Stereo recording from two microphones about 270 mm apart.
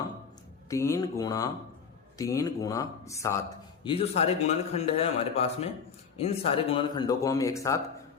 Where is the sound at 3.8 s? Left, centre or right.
Left.